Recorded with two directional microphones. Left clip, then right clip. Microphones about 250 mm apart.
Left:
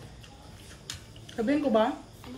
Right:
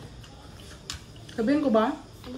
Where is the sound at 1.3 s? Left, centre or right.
Centre.